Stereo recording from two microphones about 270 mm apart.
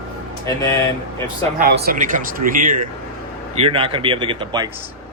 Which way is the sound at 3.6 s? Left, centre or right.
Centre.